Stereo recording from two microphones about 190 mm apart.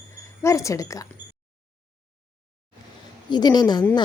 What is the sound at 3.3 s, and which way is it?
Speech, 20° left (ahead or behind).